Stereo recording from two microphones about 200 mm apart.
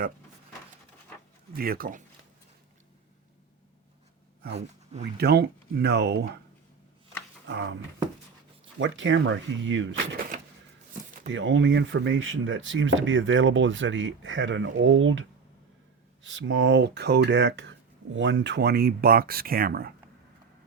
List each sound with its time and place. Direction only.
1.5 s speech: 45° right (ahead or behind)
4.5 s speech: 35° right (ahead or behind)
5.1 s speech: 55° right (ahead or behind)
7.4 s speech: 60° right (ahead or behind)
8.8 s speech: 70° right (ahead or behind)
11.3 s speech: 70° right (ahead or behind); by 19.9 s 50° right (ahead or behind)